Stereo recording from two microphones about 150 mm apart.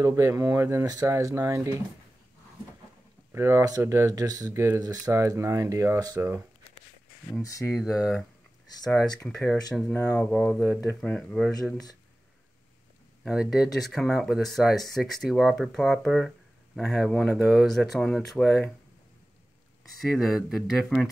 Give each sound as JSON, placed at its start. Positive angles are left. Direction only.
{"t": 0.0, "sound": "speech", "side_deg": -20}
{"t": 3.3, "sound": "speech", "side_deg": -20}
{"t": 7.7, "sound": "speech", "side_deg": -5}
{"t": 9.0, "sound": "speech", "side_deg": 25}
{"t": 9.4, "sound": "speech", "side_deg": 5}
{"t": 9.9, "sound": "speech", "side_deg": 15}
{"t": 13.2, "sound": "speech", "side_deg": 0}
{"t": 20.0, "sound": "speech", "side_deg": 0}